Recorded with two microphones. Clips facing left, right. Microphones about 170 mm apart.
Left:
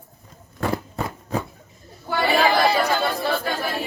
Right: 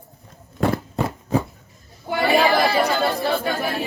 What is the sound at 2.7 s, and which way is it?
Speech, 20° right (ahead or behind).